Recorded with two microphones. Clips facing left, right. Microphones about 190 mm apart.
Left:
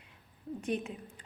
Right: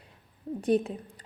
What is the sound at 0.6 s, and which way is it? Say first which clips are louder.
Speech: right 10 dB; 35° right (ahead or behind).